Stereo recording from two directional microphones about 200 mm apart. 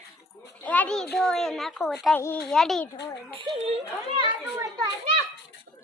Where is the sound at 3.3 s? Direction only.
25° right (ahead or behind).